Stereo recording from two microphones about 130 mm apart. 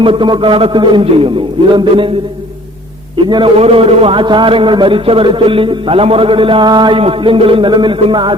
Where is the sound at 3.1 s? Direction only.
40° right (ahead or behind).